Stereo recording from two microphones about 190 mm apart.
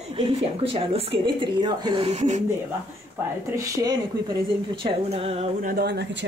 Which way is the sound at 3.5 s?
20° right (ahead or behind).